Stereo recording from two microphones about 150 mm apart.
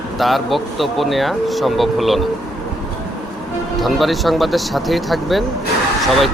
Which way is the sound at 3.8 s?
Centre (ahead or behind).